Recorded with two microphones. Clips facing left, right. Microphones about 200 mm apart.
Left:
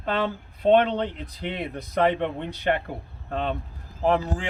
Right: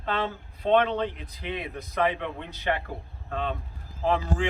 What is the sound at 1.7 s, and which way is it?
Speech, 35° left (ahead or behind).